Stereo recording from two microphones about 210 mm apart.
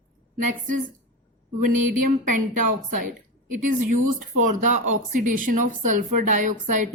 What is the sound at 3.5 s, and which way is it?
Speech, 40° right (ahead or behind).